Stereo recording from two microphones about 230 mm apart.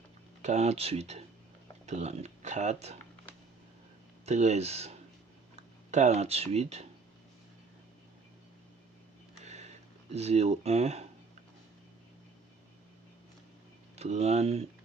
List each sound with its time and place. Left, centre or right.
0.4 s speech: right
4.3 s speech: right
9.4 s a sound: right
13.9 s speech: right